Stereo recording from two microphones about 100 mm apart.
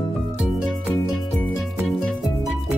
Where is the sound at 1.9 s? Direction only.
Centre (ahead or behind).